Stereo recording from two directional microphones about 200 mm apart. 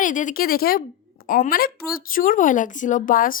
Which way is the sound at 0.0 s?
40° left (ahead or behind).